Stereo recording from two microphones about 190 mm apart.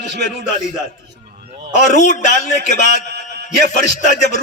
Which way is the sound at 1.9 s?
40° left (ahead or behind).